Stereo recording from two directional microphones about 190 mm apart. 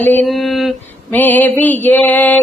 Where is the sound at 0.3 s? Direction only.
Centre (ahead or behind).